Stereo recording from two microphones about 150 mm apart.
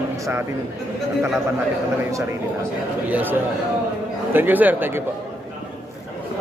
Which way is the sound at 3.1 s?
10° right (ahead or behind).